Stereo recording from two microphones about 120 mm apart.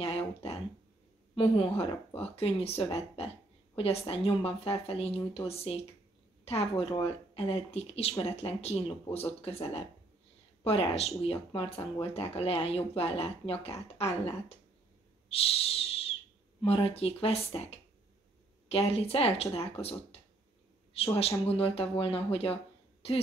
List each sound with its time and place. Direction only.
0.0 s throat clearing: 55° left (ahead or behind)
1.3 s a woman's voice: 50° left (ahead or behind)
15.2 s whistle: 55° left (ahead or behind)
16.6 s speech: 55° left (ahead or behind)